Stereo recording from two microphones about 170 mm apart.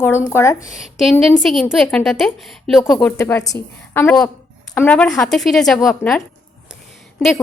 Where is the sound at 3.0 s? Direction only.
10° left (ahead or behind).